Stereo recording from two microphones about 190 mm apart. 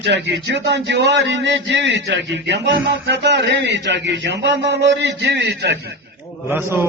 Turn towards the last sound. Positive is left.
turn(degrees=-10)  # may be behind; listen again after turning